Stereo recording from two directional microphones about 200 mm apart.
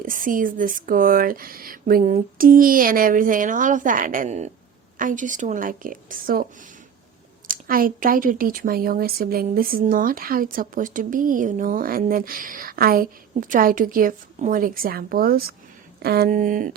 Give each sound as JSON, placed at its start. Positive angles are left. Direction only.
{"t": 0.0, "sound": "a woman's voice", "side_deg": -45}
{"t": 7.4, "sound": "speech", "side_deg": -45}